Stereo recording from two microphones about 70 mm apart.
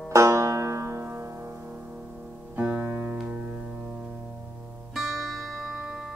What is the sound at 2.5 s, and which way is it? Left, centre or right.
Music, right.